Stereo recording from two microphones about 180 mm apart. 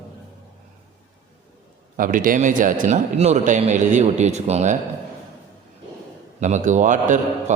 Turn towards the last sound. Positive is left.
turn(degrees=-45)  # may be behind; listen again after turning